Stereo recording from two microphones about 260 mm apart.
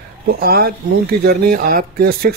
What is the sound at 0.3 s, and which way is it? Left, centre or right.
Speech, right.